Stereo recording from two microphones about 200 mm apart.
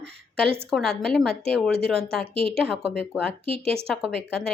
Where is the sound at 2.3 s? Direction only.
30° right (ahead or behind).